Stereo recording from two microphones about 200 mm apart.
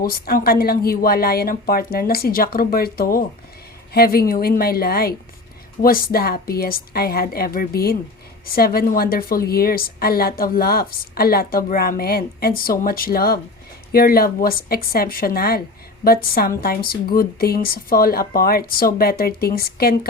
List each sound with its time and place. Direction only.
0.0 s a woman's voice: 50° left (ahead or behind)